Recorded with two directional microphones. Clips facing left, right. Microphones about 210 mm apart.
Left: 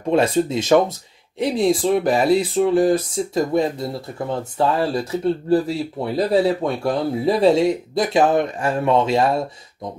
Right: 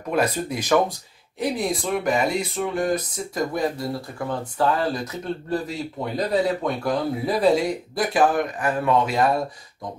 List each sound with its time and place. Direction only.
0.1 s speech: 25° left (ahead or behind)